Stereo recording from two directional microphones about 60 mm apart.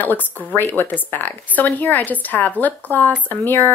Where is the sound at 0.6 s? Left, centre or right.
Left.